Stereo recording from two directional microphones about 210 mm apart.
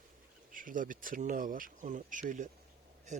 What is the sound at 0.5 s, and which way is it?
Speech, 40° right (ahead or behind).